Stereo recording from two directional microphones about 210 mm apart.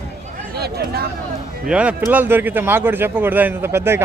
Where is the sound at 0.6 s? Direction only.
50° right (ahead or behind).